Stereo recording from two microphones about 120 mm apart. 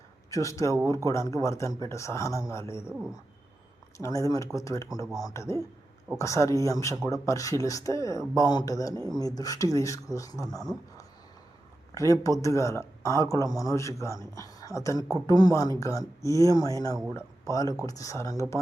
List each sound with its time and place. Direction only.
0.3 s speech: 25° left (ahead or behind)
3.9 s speech: 25° left (ahead or behind)
11.9 s speech: 25° left (ahead or behind)